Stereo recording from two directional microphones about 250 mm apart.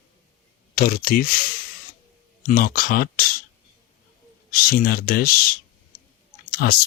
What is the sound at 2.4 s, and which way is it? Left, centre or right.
Speech, left.